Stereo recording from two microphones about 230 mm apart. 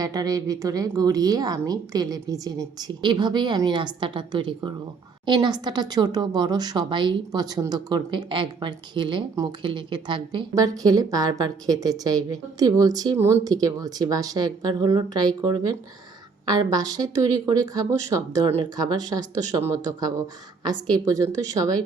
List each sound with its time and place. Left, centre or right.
0.0 s speech: centre